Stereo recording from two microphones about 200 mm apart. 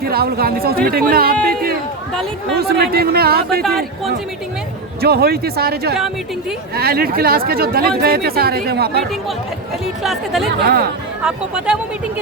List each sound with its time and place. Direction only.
0.0 s speech: 50° right (ahead or behind)
2.6 s speech: 50° right (ahead or behind)
3.6 s speech: centre (ahead or behind)
4.9 s speech: 50° right (ahead or behind)
9.8 s speech: centre (ahead or behind)
10.6 s speech: 55° right (ahead or behind)
11.2 s speech: 5° right (ahead or behind)